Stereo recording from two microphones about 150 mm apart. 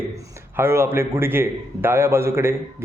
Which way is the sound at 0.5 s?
15° right (ahead or behind).